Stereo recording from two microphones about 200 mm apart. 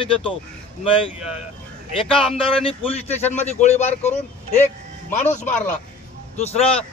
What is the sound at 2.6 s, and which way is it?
A man's voice, 30° left (ahead or behind).